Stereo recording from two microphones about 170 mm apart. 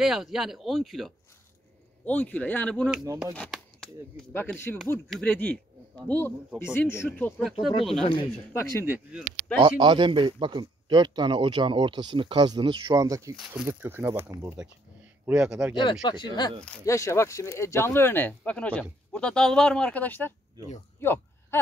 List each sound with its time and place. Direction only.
0.0 s speech: centre (ahead or behind)
3.3 s chopping: centre (ahead or behind)
4.3 s speech: 10° left (ahead or behind)
8.8 s speech: 10° right (ahead or behind)
9.6 s speech: 30° right (ahead or behind); by 15.7 s 5° right (ahead or behind)
15.7 s speech: 25° left (ahead or behind); by 20.3 s 10° left (ahead or behind)
21.0 s a sound: 15° left (ahead or behind)